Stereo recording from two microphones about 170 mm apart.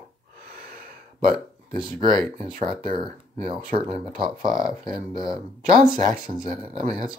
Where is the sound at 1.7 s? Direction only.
25° right (ahead or behind).